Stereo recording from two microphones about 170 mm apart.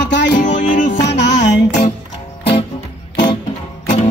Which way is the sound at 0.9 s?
90° left.